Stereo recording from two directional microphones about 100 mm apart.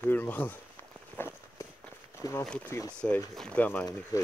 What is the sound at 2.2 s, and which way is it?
Speech, 35° left (ahead or behind).